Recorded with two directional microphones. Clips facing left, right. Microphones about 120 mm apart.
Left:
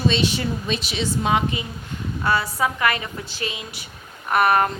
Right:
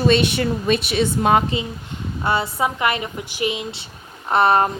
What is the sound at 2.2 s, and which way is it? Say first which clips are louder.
A woman's voice: right 1 dB; 25° right (ahead or behind).